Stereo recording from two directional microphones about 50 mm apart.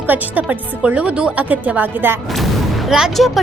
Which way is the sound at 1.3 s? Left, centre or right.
Right.